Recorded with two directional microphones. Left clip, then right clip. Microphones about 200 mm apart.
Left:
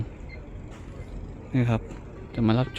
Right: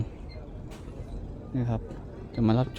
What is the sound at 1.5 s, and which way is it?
Speech, 15° left (ahead or behind).